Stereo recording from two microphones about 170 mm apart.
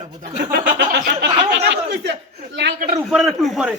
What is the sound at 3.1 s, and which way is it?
Speech, centre (ahead or behind).